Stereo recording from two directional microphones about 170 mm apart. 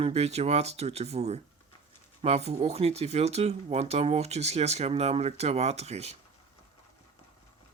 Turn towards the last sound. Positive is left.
turn(degrees=-40)  # may be behind; listen again after turning